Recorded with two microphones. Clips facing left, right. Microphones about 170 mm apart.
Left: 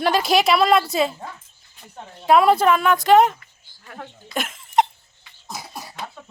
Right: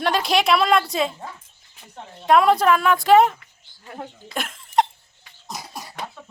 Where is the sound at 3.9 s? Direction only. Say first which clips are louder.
Right 2 dB; 20° right (ahead or behind).